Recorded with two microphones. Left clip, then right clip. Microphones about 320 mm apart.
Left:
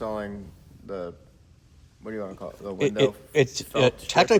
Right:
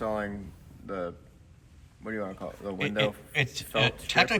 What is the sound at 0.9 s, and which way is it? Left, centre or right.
Speech, centre.